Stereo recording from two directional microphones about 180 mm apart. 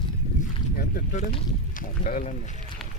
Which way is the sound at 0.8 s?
55° left (ahead or behind).